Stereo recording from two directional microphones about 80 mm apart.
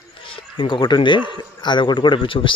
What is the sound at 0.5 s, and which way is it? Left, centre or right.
A man's voice, left.